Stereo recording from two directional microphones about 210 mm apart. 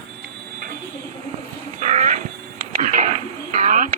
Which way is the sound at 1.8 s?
35° right (ahead or behind).